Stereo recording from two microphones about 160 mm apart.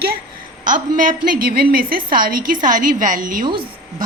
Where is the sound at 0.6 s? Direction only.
55° right (ahead or behind).